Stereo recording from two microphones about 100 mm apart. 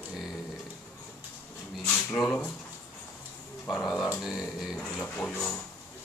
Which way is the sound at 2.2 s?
20° left (ahead or behind).